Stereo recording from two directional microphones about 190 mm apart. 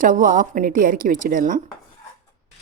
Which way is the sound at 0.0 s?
45° right (ahead or behind).